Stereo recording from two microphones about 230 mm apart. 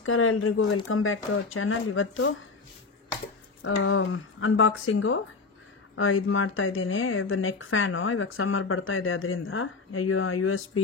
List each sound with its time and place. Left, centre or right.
0.0 s speech: left
3.6 s speech: left